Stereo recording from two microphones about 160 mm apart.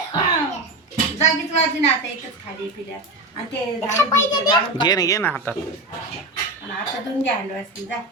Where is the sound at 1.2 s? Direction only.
45° left (ahead or behind).